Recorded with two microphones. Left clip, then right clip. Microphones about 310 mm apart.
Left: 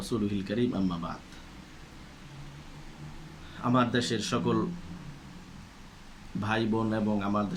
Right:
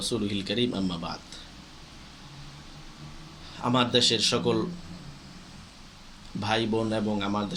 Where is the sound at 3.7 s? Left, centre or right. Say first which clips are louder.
Right 4 dB; centre.